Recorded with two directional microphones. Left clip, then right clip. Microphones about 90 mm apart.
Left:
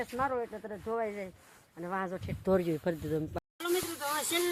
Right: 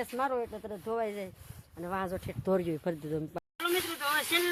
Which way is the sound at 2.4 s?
10° left (ahead or behind).